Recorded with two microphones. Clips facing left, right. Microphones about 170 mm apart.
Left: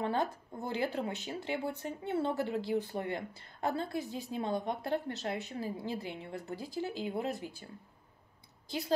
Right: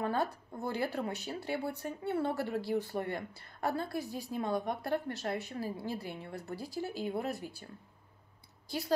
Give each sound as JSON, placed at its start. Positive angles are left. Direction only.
{"t": 0.0, "sound": "speech", "side_deg": 20}
{"t": 8.6, "sound": "speech", "side_deg": 20}